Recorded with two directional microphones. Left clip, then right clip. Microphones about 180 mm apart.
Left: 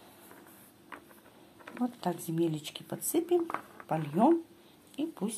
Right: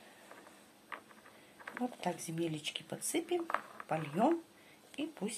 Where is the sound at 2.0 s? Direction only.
25° left (ahead or behind).